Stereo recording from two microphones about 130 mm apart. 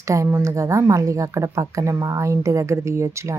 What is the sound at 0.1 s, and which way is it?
A woman's voice, 20° right (ahead or behind).